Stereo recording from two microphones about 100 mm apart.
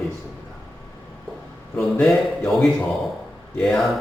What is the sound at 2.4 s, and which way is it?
A man's voice, centre (ahead or behind).